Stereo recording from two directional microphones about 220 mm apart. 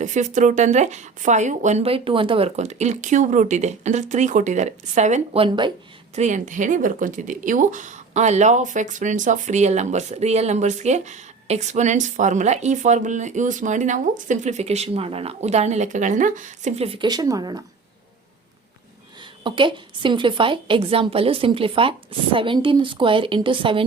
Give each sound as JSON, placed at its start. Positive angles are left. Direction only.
{"t": 0.0, "sound": "speech", "side_deg": -35}
{"t": 6.1, "sound": "speech", "side_deg": -35}
{"t": 19.5, "sound": "a woman's voice", "side_deg": -20}